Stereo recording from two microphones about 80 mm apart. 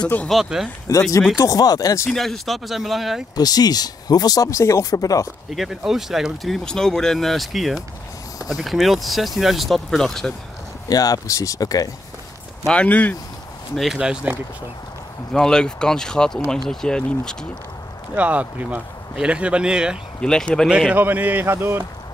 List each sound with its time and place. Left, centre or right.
0.3 s speech: centre
0.9 s speech: left
2.0 s speech: centre
3.3 s speech: left
5.5 s speech: centre
10.9 s speech: left
12.7 s speech: centre
13.7 s a man's voice: centre
15.3 s speech: centre
18.1 s a man's voice: centre
20.2 s speech: centre
20.7 s a man's voice: centre; by 21.8 s right